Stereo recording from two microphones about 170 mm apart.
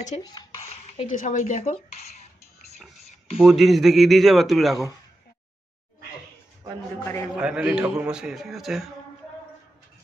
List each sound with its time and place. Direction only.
0.2 s speech: 25° left (ahead or behind)
0.7 s speech: 45° left (ahead or behind)
3.4 s a man's voice: centre (ahead or behind)
7.3 s a man's voice: 5° right (ahead or behind)